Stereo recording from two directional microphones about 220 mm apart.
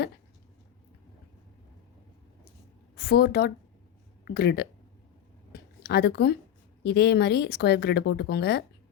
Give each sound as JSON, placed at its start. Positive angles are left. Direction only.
{"t": 2.9, "sound": "a woman's voice", "side_deg": 45}
{"t": 5.5, "sound": "a sound", "side_deg": 45}
{"t": 6.8, "sound": "speech", "side_deg": 45}